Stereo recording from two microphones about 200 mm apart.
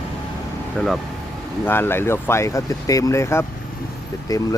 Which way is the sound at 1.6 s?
10° left (ahead or behind).